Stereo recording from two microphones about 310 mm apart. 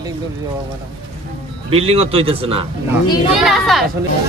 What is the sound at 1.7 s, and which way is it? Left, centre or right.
A man's voice, centre.